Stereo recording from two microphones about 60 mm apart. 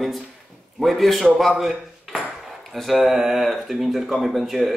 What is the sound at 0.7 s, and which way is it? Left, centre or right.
Speech, centre.